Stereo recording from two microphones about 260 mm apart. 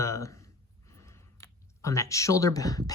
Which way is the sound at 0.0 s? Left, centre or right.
Centre.